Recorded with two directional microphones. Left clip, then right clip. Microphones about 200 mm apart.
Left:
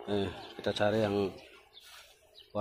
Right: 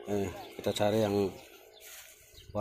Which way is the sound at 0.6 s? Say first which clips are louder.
Right 1 dB; 20° right (ahead or behind).